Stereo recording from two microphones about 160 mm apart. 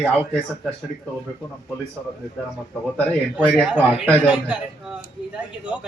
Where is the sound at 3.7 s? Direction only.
10° right (ahead or behind).